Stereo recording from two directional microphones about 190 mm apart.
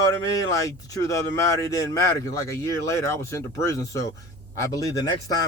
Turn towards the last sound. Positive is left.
turn(degrees=20)  # may be behind; listen again after turning